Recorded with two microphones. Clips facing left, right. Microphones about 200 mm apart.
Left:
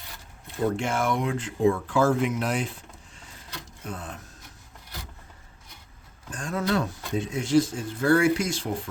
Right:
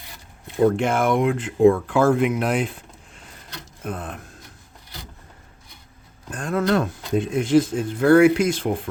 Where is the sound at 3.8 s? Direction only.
55° right (ahead or behind).